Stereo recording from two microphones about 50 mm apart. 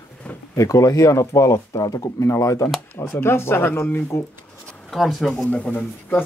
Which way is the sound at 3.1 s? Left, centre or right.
Left.